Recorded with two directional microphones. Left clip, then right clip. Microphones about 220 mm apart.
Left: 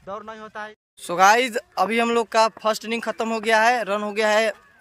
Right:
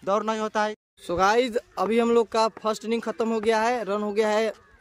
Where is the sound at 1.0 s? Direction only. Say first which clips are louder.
Left 5 dB; centre (ahead or behind).